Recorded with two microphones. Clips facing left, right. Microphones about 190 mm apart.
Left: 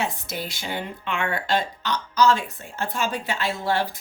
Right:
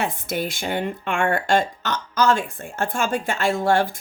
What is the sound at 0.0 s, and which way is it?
Speech, 55° right (ahead or behind).